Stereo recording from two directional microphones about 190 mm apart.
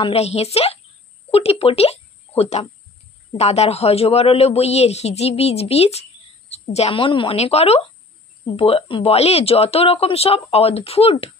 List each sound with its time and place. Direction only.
0.0 s a woman's voice: 35° left (ahead or behind)